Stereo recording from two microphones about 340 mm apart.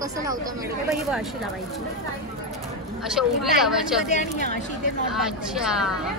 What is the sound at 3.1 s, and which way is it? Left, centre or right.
Speech, centre.